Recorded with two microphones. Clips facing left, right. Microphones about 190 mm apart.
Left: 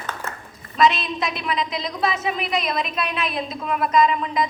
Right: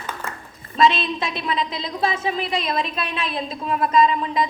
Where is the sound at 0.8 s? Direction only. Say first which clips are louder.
Right 1 dB; 30° right (ahead or behind).